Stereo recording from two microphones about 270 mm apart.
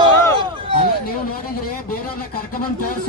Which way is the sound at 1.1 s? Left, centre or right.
Left.